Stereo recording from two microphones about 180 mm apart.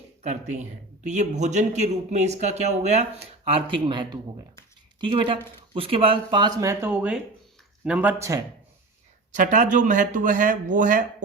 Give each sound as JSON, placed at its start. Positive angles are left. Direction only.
{"t": 1.0, "sound": "speech", "side_deg": -40}
{"t": 9.3, "sound": "speech", "side_deg": -45}